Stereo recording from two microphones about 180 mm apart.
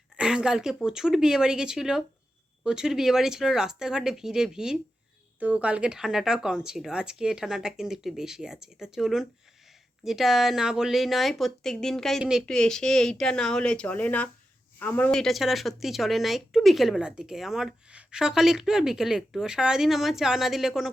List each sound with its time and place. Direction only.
0.2 s speech: 5° right (ahead or behind)